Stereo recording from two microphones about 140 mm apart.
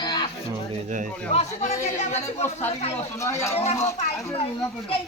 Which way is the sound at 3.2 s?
20° left (ahead or behind).